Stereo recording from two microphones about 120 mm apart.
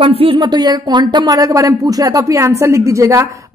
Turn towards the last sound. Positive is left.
turn(degrees=-25)  # may be behind; listen again after turning